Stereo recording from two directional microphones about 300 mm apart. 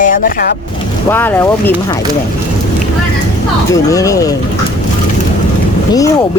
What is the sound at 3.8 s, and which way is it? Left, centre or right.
Speech, centre.